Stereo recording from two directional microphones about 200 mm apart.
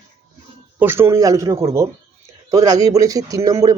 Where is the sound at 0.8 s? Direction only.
10° right (ahead or behind).